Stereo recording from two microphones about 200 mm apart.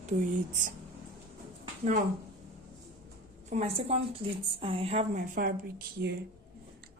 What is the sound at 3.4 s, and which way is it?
A woman's voice, 35° right (ahead or behind).